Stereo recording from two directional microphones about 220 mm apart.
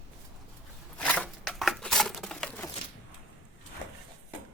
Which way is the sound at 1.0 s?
5° left (ahead or behind).